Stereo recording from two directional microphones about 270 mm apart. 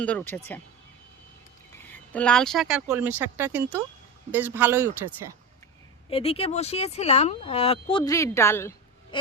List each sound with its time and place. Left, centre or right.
0.0 s speech: centre
1.7 s speech: centre
6.1 s speech: left